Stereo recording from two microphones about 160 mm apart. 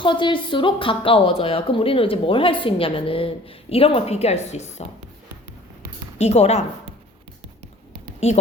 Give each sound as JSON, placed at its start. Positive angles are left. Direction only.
{"t": 0.0, "sound": "a woman's voice", "side_deg": 30}
{"t": 6.1, "sound": "a woman's voice", "side_deg": 40}